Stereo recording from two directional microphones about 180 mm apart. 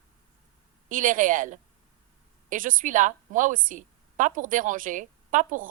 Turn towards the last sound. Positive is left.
turn(degrees=-45)  # may be behind; listen again after turning